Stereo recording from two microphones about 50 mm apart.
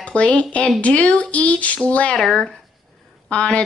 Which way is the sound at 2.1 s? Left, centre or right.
Centre.